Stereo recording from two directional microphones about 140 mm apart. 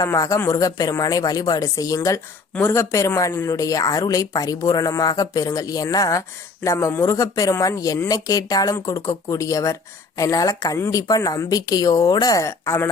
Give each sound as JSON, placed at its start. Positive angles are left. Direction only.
{"t": 0.0, "sound": "speech", "side_deg": 25}